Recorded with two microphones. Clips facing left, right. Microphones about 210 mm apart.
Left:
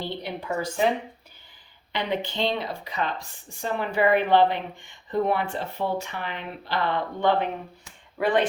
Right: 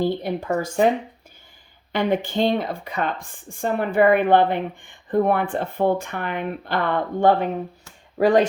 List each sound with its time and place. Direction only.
0.0 s speech: 45° right (ahead or behind)
1.9 s speech: 50° right (ahead or behind)